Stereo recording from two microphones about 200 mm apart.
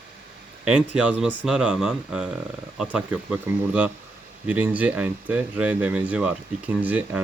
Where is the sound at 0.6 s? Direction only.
5° right (ahead or behind).